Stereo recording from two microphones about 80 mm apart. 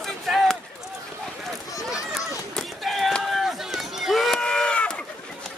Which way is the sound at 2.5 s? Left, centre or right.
Centre.